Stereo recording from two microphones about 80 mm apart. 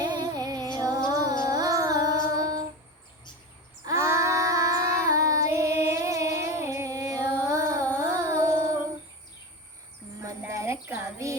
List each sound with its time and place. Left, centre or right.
0.0 s music: right
3.8 s child singing: right
5.5 s music: right
10.2 s a sound: right